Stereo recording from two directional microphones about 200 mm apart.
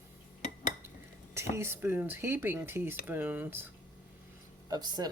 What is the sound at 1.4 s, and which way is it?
Speech, 15° right (ahead or behind).